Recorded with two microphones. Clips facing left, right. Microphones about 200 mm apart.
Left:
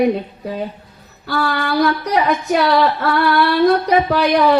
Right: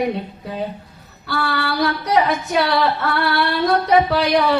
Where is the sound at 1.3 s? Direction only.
40° left (ahead or behind).